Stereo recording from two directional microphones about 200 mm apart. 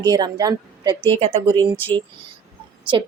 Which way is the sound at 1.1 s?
30° right (ahead or behind).